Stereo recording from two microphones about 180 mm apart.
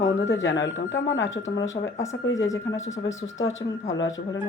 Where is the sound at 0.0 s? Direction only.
90° left.